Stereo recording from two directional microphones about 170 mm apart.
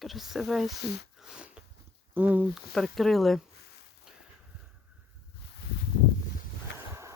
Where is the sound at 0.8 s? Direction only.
75° left (ahead or behind).